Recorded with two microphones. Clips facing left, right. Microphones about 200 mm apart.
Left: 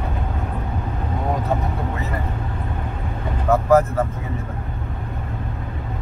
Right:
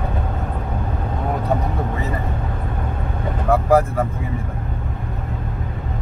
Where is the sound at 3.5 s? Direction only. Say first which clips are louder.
Even; 10° right (ahead or behind).